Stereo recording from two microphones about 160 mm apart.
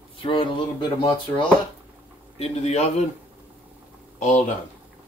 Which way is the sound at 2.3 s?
40° left (ahead or behind).